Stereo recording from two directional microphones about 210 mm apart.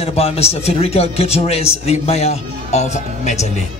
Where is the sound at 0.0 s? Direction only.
30° left (ahead or behind).